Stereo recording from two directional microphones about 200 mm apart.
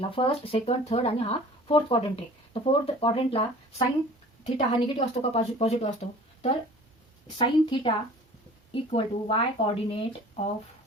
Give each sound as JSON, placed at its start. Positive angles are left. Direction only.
{"t": 0.1, "sound": "a woman's voice", "side_deg": 25}
{"t": 7.3, "sound": "speech", "side_deg": 25}